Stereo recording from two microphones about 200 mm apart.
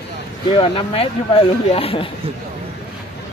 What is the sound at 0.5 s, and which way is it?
Speech, 25° left (ahead or behind).